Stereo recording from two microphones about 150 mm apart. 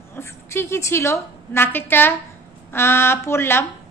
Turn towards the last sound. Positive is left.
turn(degrees=15)  # may be behind; listen again after turning